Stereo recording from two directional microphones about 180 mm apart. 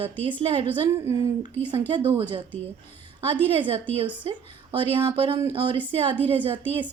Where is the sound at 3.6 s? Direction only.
30° right (ahead or behind).